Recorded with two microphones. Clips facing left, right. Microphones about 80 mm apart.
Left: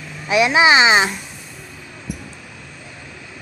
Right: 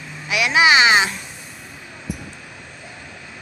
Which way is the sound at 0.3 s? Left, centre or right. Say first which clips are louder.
Left 3 dB; left.